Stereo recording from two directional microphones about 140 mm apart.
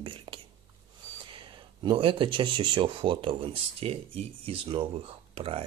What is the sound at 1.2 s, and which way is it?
Speech, 35° right (ahead or behind).